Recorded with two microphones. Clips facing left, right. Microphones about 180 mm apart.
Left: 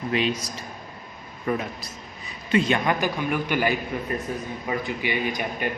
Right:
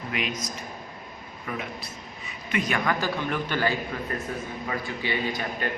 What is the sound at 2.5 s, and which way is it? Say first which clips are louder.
A man's voice: left 5 dB; 25° left (ahead or behind).